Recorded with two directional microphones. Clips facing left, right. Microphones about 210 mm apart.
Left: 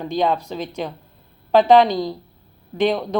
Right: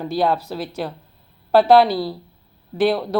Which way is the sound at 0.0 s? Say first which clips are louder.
Even; 5° right (ahead or behind).